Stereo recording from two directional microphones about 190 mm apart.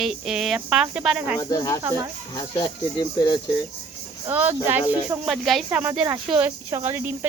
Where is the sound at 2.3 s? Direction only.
20° left (ahead or behind).